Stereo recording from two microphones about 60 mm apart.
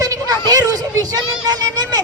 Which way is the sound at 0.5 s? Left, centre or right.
Right.